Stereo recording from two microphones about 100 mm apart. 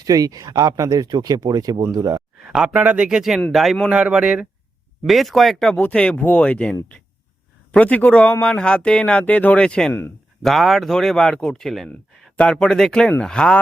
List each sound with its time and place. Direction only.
0.0 s speech: 40° right (ahead or behind)
2.5 s speech: 10° right (ahead or behind); by 13.6 s 5° left (ahead or behind)